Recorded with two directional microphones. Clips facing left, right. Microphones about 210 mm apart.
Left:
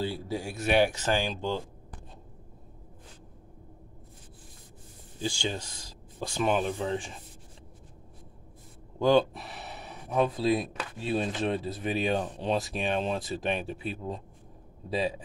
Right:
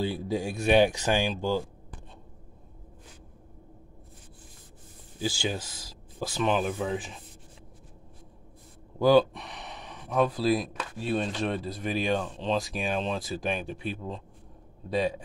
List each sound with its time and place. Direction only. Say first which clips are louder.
0.0 s speech: right 3 dB; 15° right (ahead or behind)
5.2 s speech: right 2 dB; 5° right (ahead or behind)
9.0 s speech: right 2 dB; 5° right (ahead or behind)
9.4 s speech: even; 5° left (ahead or behind)
14.9 s speech: right 2 dB; 5° left (ahead or behind)